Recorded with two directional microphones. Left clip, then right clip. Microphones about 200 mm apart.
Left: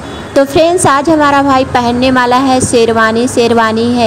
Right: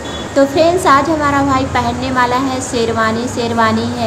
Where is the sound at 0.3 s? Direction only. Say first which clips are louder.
Left 3 dB; 40° left (ahead or behind).